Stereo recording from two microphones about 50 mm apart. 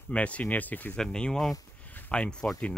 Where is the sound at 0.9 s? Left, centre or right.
Centre.